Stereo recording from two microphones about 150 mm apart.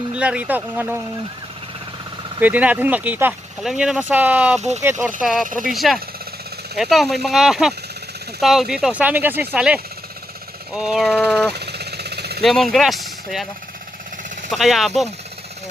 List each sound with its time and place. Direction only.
0.1 s speech: 10° right (ahead or behind)
2.4 s speech: 10° right (ahead or behind)
5.2 s speech: centre (ahead or behind)
11.5 s vehicle: 90° right
12.4 s speech: centre (ahead or behind)
14.5 s speech: centre (ahead or behind)